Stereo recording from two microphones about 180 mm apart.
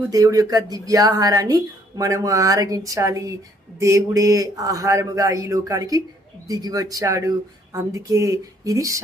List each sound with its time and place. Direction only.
0.1 s speech: 20° right (ahead or behind)